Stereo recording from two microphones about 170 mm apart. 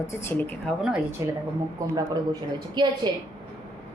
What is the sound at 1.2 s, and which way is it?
A woman's voice, 20° right (ahead or behind).